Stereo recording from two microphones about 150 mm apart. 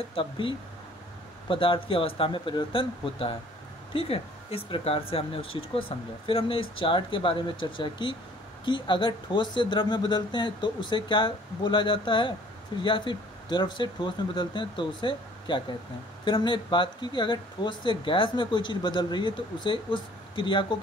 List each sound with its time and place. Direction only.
0.1 s speech: 35° left (ahead or behind)